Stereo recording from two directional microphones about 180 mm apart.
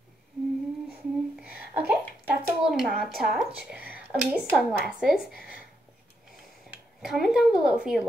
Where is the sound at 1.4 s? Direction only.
5° right (ahead or behind).